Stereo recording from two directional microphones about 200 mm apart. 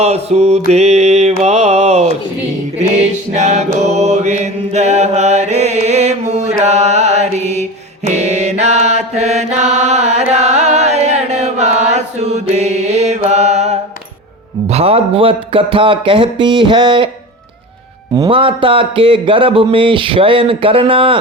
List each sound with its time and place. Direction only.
0.0 s mantra: 30° right (ahead or behind)
1.4 s speech: 35° right (ahead or behind)
3.3 s mantra: 35° right (ahead or behind)
14.7 s speech: 30° right (ahead or behind)
18.1 s speech: 25° right (ahead or behind)